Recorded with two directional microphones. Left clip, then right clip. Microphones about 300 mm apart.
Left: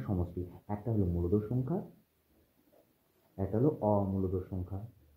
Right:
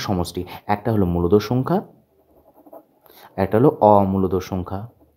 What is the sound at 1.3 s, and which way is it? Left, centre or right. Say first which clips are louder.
Speech: right 17 dB; right.